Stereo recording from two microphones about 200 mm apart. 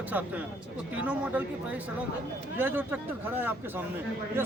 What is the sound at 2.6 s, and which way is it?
Speech, 10° right (ahead or behind).